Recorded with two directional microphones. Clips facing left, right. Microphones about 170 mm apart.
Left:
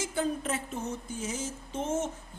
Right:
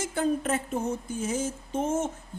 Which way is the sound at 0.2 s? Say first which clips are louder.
Right 5 dB; 55° right (ahead or behind).